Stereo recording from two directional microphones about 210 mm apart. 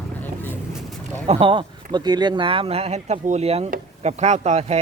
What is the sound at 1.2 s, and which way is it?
Speech, 25° right (ahead or behind).